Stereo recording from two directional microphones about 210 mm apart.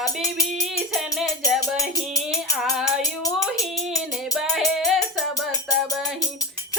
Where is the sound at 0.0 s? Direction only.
15° left (ahead or behind).